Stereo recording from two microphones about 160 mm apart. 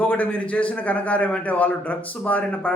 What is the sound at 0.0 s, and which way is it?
A man's voice, 10° left (ahead or behind).